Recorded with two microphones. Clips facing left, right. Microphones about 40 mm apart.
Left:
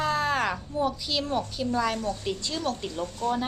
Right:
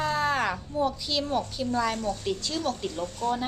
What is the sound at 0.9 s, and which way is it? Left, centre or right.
A woman's voice, centre.